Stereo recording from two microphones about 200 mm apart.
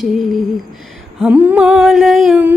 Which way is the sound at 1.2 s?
5° right (ahead or behind).